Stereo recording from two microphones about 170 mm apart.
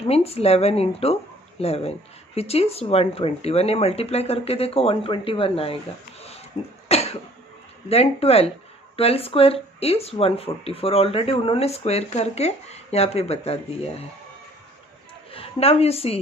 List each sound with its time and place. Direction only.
0.1 s speech: 35° left (ahead or behind)
6.8 s cough: 40° left (ahead or behind)
7.9 s speech: 35° left (ahead or behind)
15.3 s a woman's voice: 35° left (ahead or behind)